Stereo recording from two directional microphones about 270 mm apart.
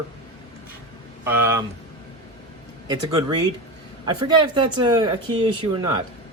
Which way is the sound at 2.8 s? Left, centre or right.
Centre.